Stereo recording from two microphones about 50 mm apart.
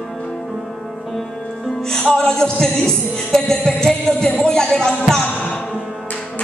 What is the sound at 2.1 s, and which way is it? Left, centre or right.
Music, centre.